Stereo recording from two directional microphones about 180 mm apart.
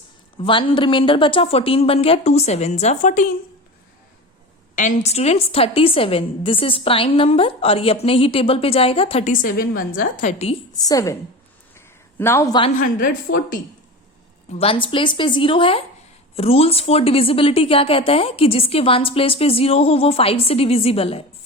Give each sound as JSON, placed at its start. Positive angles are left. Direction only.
{"t": 0.4, "sound": "a woman's voice", "side_deg": 25}
{"t": 4.7, "sound": "a woman's voice", "side_deg": 45}
{"t": 10.7, "sound": "a woman's voice", "side_deg": 20}
{"t": 12.2, "sound": "speech", "side_deg": 15}
{"t": 12.8, "sound": "a woman's voice", "side_deg": 50}
{"t": 14.5, "sound": "a woman's voice", "side_deg": 30}